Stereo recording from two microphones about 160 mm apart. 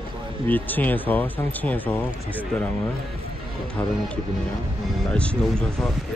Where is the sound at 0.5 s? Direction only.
10° left (ahead or behind).